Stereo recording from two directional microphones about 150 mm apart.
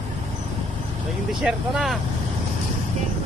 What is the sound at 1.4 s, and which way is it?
Speech, 5° right (ahead or behind).